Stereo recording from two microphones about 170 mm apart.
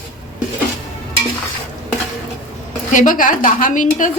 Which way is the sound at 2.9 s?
50° left (ahead or behind).